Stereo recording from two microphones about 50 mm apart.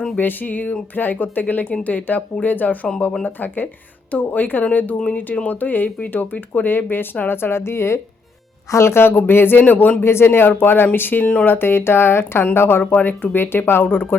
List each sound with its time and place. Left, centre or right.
0.2 s speech: left
10.0 s speech: left
12.8 s speech: left